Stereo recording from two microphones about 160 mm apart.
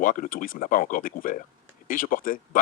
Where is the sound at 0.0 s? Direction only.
55° left (ahead or behind).